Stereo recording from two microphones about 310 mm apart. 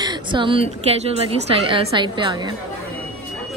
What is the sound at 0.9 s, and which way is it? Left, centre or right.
A woman's voice, centre.